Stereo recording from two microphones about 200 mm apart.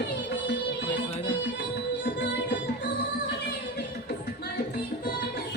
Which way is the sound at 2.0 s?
60° left (ahead or behind).